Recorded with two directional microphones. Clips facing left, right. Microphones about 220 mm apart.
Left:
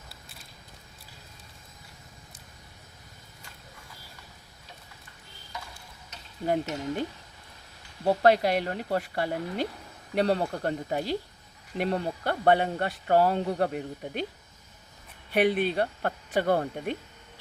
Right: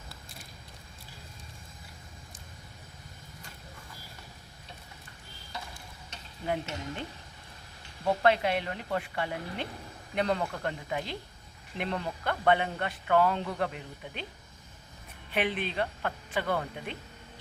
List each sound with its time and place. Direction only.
6.4 s speech: 40° left (ahead or behind)
8.0 s speech: 40° left (ahead or behind)
15.3 s speech: 40° left (ahead or behind)